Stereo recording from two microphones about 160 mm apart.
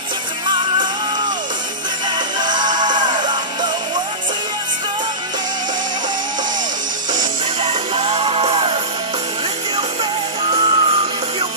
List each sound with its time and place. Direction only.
0.5 s music: 30° right (ahead or behind)
7.6 s music: 40° right (ahead or behind)
10.5 s music: 35° right (ahead or behind)